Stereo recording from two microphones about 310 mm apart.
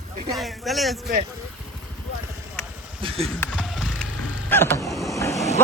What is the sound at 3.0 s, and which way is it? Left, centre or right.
Speech, centre.